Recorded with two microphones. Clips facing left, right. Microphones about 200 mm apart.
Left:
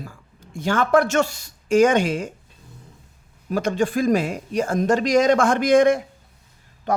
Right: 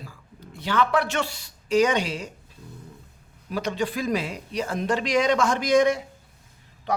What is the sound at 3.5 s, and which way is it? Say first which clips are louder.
Speech: left 6 dB; 50° left (ahead or behind).